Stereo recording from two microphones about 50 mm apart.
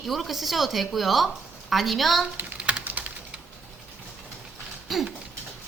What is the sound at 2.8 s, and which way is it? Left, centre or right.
Typing, right.